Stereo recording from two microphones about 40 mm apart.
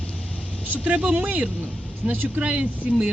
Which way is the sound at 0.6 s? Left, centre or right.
Right.